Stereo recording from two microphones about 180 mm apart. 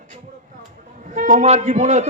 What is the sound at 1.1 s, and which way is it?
Speech, 45° right (ahead or behind).